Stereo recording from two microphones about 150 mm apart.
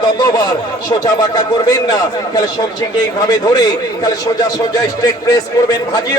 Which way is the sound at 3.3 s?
25° left (ahead or behind).